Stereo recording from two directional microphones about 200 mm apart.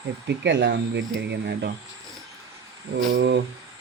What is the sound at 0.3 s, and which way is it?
Speech, 60° right (ahead or behind).